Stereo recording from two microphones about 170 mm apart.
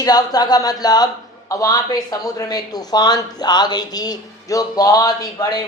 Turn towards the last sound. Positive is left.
turn(degrees=20)  # may be behind; listen again after turning